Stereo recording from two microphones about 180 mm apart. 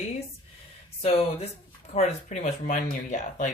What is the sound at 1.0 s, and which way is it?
Speech, 35° left (ahead or behind).